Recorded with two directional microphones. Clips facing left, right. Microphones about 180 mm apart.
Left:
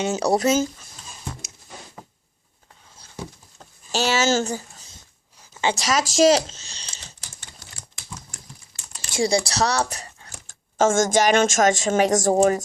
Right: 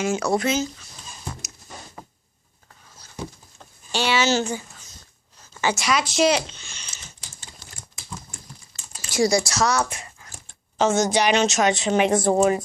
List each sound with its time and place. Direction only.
0.0 s speech: 35° left (ahead or behind)
3.9 s speech: 40° left (ahead or behind)
5.4 s a sound: 20° left (ahead or behind)
5.7 s speech: 40° left (ahead or behind)
9.1 s speech: 30° left (ahead or behind)